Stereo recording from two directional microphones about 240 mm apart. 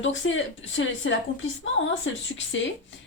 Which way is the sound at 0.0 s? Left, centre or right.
Left.